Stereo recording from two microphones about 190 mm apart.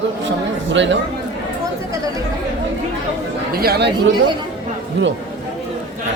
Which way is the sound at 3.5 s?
55° right (ahead or behind).